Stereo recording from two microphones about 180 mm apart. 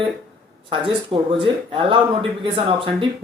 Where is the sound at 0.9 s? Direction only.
30° right (ahead or behind).